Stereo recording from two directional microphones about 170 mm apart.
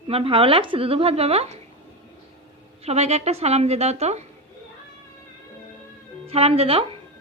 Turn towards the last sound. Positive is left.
turn(degrees=-35)  # may be behind; listen again after turning